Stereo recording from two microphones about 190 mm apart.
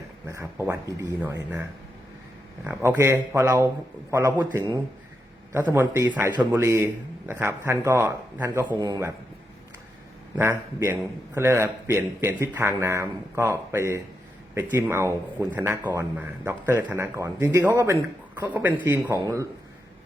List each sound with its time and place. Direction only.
0.3 s a man's voice: 15° right (ahead or behind)
2.6 s a man's voice: 10° right (ahead or behind)
10.3 s a man's voice: 15° right (ahead or behind)